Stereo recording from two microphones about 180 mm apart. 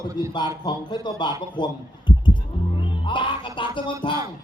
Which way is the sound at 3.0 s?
25° left (ahead or behind).